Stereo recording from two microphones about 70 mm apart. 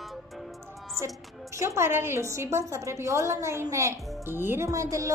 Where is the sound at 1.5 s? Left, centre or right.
Right.